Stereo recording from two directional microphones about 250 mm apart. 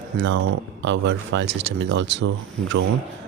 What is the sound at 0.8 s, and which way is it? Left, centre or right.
Speech, right.